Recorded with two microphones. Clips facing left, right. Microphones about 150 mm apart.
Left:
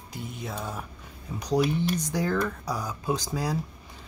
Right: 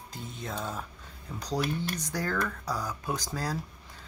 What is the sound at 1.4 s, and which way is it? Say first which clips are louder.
Speech: left 6 dB; 15° left (ahead or behind).